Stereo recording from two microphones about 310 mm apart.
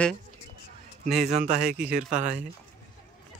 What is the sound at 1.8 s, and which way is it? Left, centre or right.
Speech, right.